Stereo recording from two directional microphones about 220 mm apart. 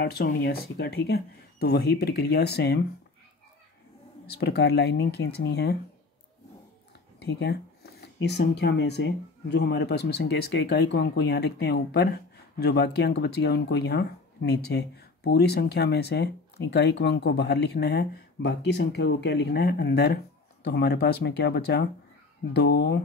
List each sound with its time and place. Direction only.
0.0 s speech: 45° left (ahead or behind)
4.4 s speech: 50° left (ahead or behind)
7.2 s speech: 50° left (ahead or behind)